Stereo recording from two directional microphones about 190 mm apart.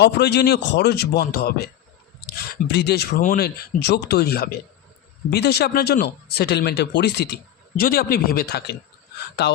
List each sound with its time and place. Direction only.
0.0 s speech: 65° left (ahead or behind)
2.7 s speech: 60° left (ahead or behind)
7.8 s speech: 50° left (ahead or behind)